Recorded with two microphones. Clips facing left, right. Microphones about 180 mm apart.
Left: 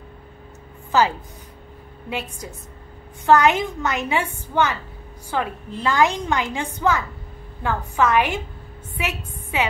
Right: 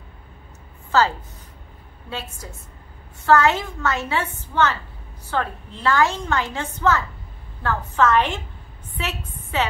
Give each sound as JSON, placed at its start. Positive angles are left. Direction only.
{"t": 0.9, "sound": "a woman's voice", "side_deg": 15}